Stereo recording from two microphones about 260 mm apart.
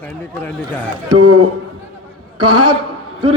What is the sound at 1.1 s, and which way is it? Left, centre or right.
A man's voice, right.